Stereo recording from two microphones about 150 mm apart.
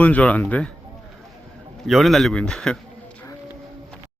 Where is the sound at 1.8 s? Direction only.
Centre (ahead or behind).